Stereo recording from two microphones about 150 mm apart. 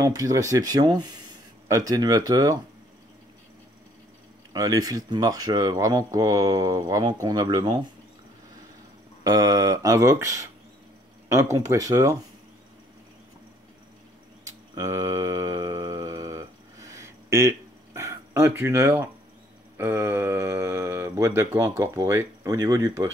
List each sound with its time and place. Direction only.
0.0 s speech: 25° right (ahead or behind)
4.5 s speech: 25° right (ahead or behind)
9.2 s speech: 25° right (ahead or behind)
14.4 s a sound: 25° right (ahead or behind)
19.8 s speech: 15° right (ahead or behind)